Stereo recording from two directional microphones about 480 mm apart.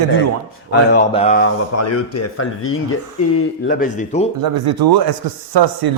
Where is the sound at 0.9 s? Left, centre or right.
Centre.